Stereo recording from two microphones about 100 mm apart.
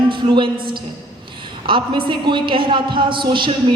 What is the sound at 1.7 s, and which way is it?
Speech, 55° right (ahead or behind).